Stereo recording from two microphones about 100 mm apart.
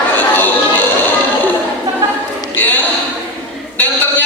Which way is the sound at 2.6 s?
20° left (ahead or behind).